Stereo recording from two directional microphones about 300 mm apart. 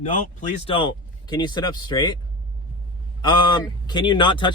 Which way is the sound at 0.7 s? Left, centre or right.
Centre.